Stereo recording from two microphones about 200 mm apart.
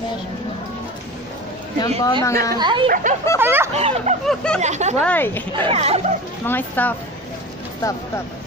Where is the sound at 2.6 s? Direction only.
25° right (ahead or behind).